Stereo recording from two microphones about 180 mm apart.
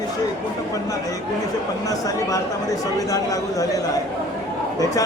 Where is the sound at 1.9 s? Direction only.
20° left (ahead or behind).